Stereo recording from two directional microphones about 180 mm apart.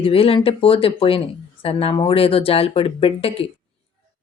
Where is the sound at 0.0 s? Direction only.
30° left (ahead or behind).